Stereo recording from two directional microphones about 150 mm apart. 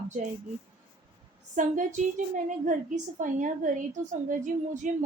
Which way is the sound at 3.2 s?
60° right (ahead or behind).